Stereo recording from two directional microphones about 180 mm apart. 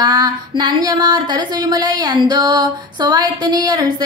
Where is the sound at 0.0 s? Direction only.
20° right (ahead or behind).